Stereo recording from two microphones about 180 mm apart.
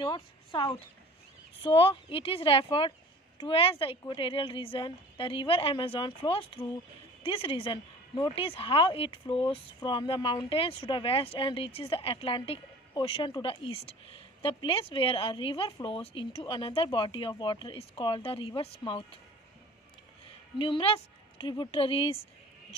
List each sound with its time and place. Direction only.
0.0 s a woman's voice: 25° left (ahead or behind)
20.5 s a woman's voice: 25° left (ahead or behind)